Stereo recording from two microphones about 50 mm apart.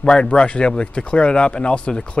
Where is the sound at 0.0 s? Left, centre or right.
Centre.